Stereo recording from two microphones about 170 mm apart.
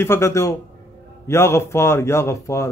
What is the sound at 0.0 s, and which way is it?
A man's voice, 15° left (ahead or behind).